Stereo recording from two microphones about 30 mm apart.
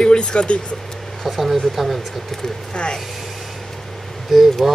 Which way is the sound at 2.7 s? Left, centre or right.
Left.